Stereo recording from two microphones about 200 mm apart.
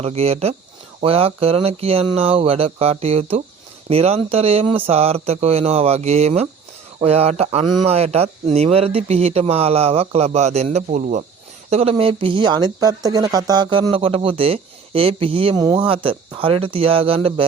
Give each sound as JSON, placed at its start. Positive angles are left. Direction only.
{"t": 0.0, "sound": "speech", "side_deg": -30}